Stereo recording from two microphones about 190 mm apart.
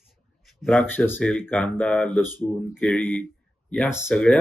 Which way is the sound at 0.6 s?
Centre (ahead or behind).